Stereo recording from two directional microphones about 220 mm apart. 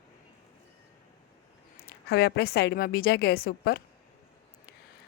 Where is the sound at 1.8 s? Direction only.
45° left (ahead or behind).